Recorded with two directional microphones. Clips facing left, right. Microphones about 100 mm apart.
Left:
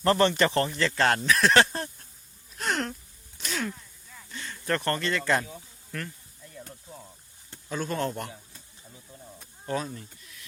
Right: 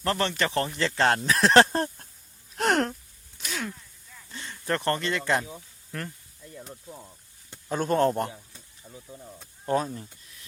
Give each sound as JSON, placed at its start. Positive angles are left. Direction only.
{"t": 0.0, "sound": "speech", "side_deg": 0}
{"t": 0.5, "sound": "speech", "side_deg": -20}
{"t": 2.6, "sound": "a sound", "side_deg": -60}
{"t": 3.4, "sound": "a sound", "side_deg": -10}
{"t": 4.3, "sound": "speech", "side_deg": -25}
{"t": 7.7, "sound": "speech", "side_deg": -45}
{"t": 9.6, "sound": "speech", "side_deg": -35}